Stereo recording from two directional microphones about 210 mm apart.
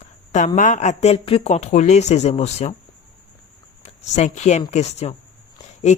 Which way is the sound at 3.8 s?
35° left (ahead or behind).